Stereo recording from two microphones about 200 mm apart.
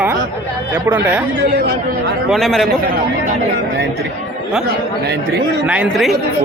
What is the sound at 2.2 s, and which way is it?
Speech, centre (ahead or behind).